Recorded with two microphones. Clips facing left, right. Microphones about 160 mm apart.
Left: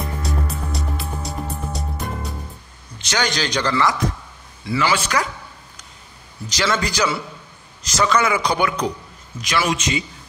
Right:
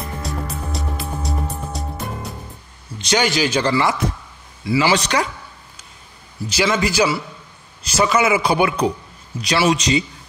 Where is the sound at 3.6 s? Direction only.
25° right (ahead or behind).